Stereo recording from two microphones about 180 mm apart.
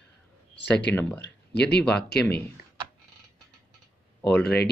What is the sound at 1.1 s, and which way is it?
Speech, 65° left (ahead or behind).